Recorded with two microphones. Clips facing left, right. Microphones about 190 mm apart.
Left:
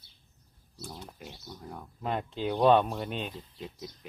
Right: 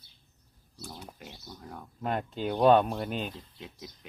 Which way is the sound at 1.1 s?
Centre (ahead or behind).